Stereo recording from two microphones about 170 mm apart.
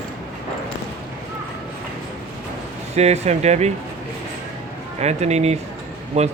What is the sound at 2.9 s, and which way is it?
Speech, 40° right (ahead or behind).